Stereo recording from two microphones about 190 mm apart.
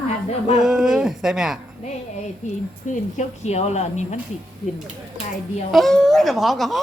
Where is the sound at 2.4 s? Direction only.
40° left (ahead or behind).